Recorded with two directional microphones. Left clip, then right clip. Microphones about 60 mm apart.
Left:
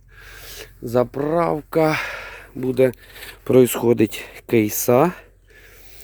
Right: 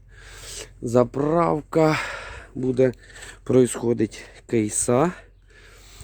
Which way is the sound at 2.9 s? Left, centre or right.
Right.